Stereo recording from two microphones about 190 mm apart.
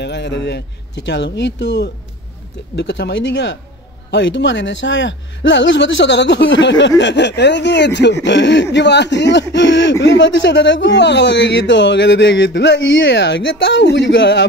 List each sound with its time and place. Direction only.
0.0 s speech: 65° left (ahead or behind)